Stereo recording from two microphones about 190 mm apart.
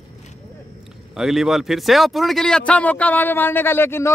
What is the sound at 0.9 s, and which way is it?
Speech, centre (ahead or behind).